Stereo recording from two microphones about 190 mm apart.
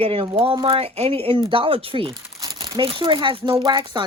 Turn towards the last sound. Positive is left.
turn(degrees=-25)  # may be behind; listen again after turning